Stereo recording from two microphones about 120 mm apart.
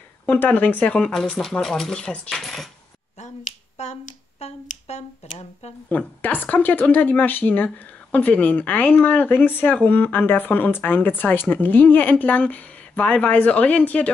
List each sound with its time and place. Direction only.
0.3 s speech: 15° left (ahead or behind)
3.2 s finger snapping: 70° left (ahead or behind)
5.9 s speech: 15° left (ahead or behind)